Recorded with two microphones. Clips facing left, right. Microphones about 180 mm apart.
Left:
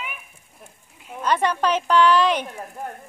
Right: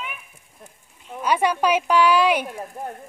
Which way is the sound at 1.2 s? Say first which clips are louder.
Right 1 dB; 10° right (ahead or behind).